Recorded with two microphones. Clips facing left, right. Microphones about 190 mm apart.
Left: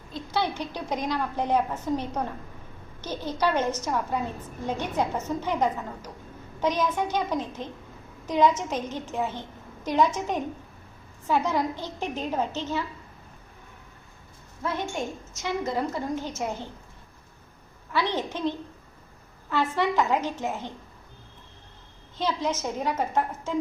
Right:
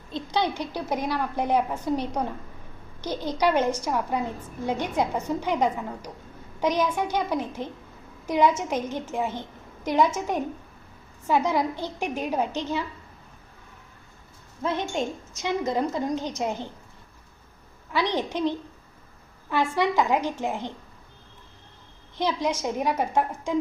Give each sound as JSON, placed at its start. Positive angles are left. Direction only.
{"t": 0.1, "sound": "a woman's voice", "side_deg": -15}
{"t": 14.6, "sound": "a woman's voice", "side_deg": -20}
{"t": 17.9, "sound": "a woman's voice", "side_deg": -15}
{"t": 22.2, "sound": "a woman's voice", "side_deg": -15}